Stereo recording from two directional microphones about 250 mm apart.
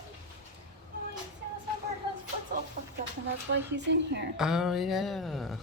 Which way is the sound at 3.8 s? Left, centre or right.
Right.